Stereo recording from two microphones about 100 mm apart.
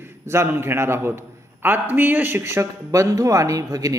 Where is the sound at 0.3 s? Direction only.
25° right (ahead or behind).